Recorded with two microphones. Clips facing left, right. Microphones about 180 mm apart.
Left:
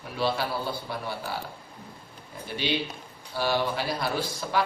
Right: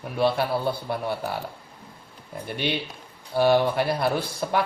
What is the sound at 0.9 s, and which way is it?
Speech, 55° right (ahead or behind).